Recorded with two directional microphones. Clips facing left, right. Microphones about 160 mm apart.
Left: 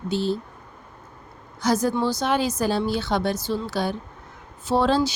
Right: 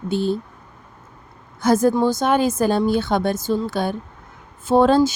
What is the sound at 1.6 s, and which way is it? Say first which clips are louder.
A woman's voice: right 5 dB; 50° right (ahead or behind).